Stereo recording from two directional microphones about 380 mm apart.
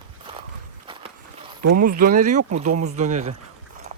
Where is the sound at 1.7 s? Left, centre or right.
Right.